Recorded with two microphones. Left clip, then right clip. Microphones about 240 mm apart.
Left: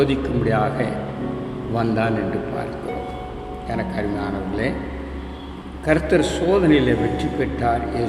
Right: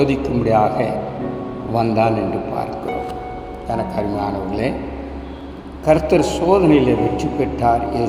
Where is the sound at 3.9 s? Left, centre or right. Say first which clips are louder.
Right 4 dB; centre.